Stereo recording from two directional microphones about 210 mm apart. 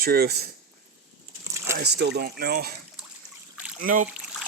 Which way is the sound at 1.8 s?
50° right (ahead or behind).